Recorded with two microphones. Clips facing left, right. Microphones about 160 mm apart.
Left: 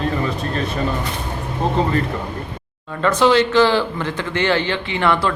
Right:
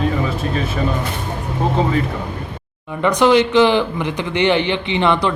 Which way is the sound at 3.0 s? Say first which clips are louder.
Right 2 dB; 15° right (ahead or behind).